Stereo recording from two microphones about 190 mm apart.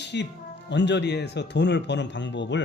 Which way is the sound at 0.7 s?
65° left (ahead or behind).